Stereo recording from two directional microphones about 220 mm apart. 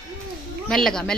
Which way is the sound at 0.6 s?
Centre (ahead or behind).